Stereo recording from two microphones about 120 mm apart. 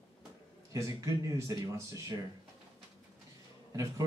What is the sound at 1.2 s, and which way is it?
Speech, 25° right (ahead or behind).